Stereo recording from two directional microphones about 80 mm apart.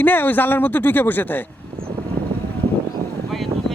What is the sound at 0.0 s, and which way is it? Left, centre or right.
A man's voice, left.